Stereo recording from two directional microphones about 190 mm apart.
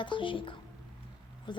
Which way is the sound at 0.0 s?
25° left (ahead or behind).